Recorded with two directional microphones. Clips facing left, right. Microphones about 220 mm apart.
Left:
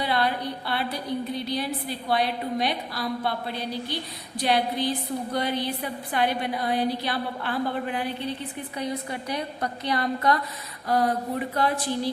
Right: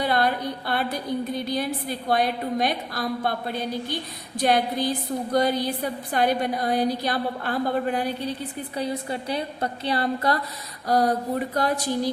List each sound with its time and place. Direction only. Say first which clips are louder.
0.0 s a woman's voice: right 3 dB; 45° right (ahead or behind)